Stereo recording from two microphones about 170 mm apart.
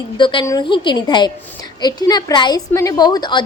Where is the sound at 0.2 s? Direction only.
30° left (ahead or behind).